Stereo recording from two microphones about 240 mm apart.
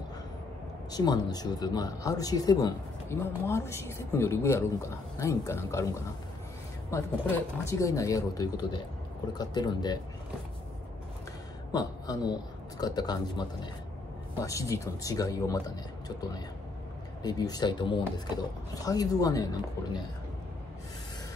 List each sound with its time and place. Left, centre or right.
0.9 s speech: centre
6.9 s speech: centre
11.7 s a man's voice: centre
17.2 s speech: centre